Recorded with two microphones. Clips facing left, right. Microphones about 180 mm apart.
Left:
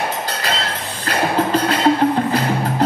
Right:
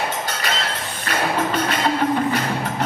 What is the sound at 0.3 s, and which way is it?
Music, 35° left (ahead or behind).